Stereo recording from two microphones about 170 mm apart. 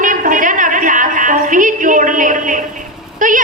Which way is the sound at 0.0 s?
50° right (ahead or behind).